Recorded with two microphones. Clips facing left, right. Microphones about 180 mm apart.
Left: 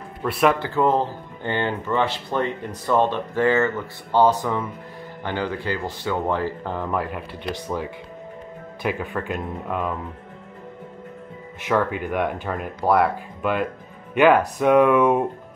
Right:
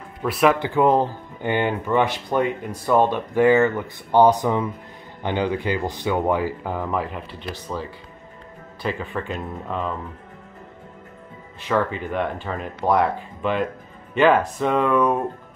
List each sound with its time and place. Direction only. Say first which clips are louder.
0.2 s speech: right 1 dB; centre (ahead or behind)
0.6 s speech: right 2 dB; 15° right (ahead or behind); by 7.5 s centre (ahead or behind)
7.5 s speech: left 2 dB; 15° left (ahead or behind)
9.1 s speech: left 1 dB; 10° left (ahead or behind)
11.6 s speech: left 1 dB; 10° left (ahead or behind)